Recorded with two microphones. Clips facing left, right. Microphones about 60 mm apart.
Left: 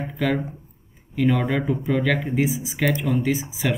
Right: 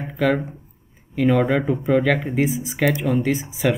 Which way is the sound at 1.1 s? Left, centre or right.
Centre.